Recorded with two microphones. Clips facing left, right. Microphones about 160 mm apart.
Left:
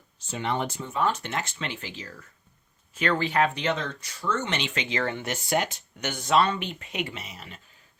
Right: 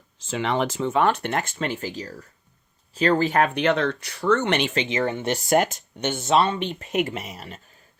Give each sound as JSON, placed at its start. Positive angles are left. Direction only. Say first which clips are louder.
{"t": 0.2, "sound": "speech", "louder": "right 5 dB", "side_deg": -90}
{"t": 4.7, "sound": "speech", "louder": "right 6 dB", "side_deg": -30}
{"t": 4.9, "sound": "speech", "louder": "right 3 dB", "side_deg": -20}
{"t": 5.3, "sound": "speech", "louder": "right 9 dB", "side_deg": -45}
{"t": 6.0, "sound": "speech", "louder": "right 3 dB", "side_deg": -25}